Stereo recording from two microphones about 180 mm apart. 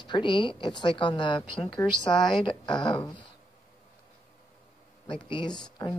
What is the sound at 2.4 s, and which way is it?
Speech, 25° left (ahead or behind).